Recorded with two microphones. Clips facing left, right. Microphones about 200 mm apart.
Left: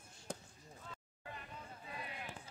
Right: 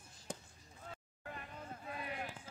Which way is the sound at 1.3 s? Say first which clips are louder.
Right 3 dB; 55° right (ahead or behind).